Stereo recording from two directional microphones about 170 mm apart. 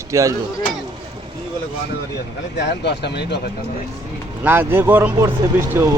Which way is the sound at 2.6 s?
80° left.